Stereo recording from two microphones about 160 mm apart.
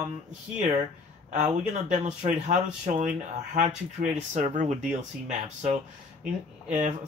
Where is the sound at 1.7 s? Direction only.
50° right (ahead or behind).